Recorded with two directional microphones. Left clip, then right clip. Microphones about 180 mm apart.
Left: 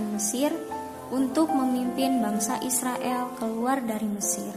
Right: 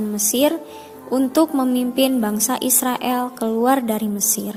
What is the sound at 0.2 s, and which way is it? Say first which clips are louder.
A woman's voice: right 10 dB; 45° right (ahead or behind).